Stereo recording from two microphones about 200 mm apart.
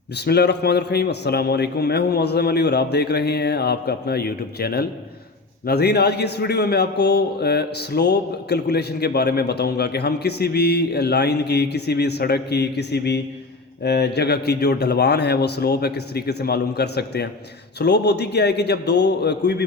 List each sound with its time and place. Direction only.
0.3 s a man's voice: 55° left (ahead or behind)